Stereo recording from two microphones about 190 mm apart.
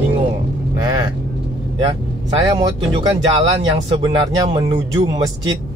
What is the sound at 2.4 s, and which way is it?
Speech, 20° right (ahead or behind).